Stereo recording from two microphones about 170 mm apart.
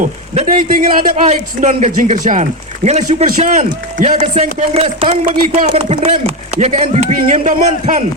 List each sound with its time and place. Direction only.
0.0 s speech: 50° right (ahead or behind)
3.2 s speech: 50° right (ahead or behind)